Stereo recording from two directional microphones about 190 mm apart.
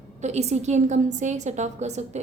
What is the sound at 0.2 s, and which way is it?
A woman's voice, 35° right (ahead or behind).